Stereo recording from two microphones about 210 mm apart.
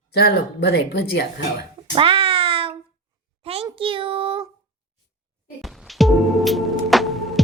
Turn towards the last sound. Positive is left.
turn(degrees=0)  # may be behind; listen again after turning